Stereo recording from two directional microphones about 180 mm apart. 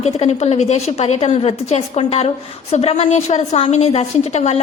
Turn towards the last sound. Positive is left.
turn(degrees=35)  # may be behind; listen again after turning